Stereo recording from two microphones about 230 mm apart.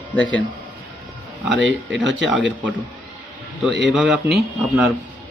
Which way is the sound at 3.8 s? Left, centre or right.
Centre.